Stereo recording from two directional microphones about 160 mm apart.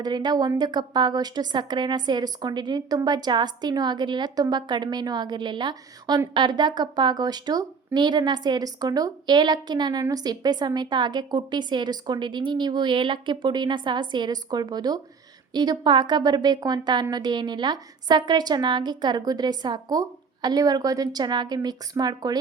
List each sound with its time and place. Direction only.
0.0 s a woman's voice: 25° right (ahead or behind)